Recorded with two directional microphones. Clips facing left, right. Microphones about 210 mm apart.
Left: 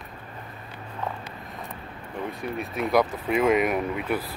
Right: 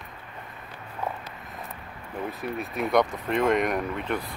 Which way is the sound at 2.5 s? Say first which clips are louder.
Left 1 dB; centre (ahead or behind).